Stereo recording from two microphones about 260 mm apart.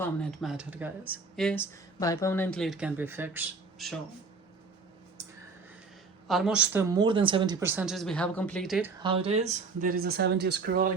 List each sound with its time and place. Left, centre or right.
0.0 s speech: centre
6.2 s speech: centre
6.9 s speech: centre
9.0 s speech: right